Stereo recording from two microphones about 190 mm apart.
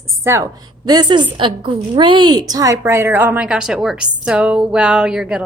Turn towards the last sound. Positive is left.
turn(degrees=-5)  # may be behind; listen again after turning